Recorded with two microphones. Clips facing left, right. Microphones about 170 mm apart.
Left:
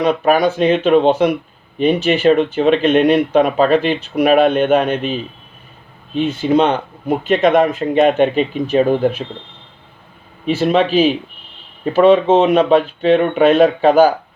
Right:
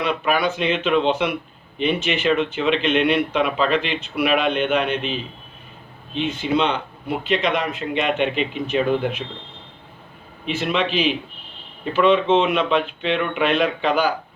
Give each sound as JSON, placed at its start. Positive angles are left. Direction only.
{"t": 0.0, "sound": "speech", "side_deg": 40}
{"t": 10.4, "sound": "speech", "side_deg": 40}